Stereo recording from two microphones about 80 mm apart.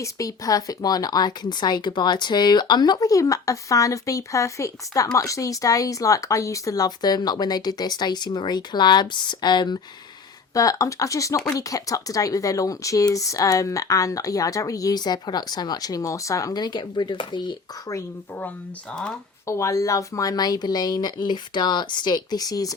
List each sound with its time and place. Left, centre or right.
0.0 s speech: left
10.5 s speech: left
16.6 s speech: left
19.5 s speech: left